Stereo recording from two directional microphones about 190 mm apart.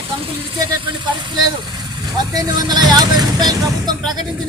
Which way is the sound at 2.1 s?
20° right (ahead or behind).